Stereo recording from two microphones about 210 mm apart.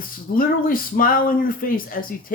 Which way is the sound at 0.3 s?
45° left (ahead or behind).